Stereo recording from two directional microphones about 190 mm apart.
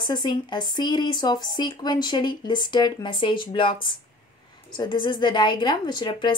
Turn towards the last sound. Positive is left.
turn(degrees=25)  # may be behind; listen again after turning